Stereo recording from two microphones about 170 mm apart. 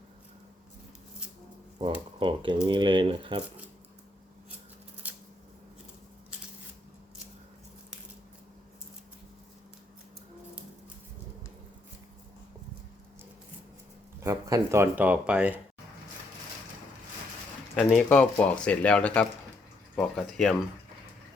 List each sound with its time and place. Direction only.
1.8 s speech: 30° right (ahead or behind)
5.0 s scissors: 10° right (ahead or behind)
14.2 s speech: 15° right (ahead or behind)
17.7 s speech: 5° left (ahead or behind)